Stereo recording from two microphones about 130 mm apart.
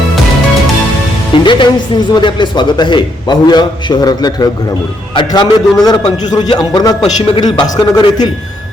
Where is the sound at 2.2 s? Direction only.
35° left (ahead or behind).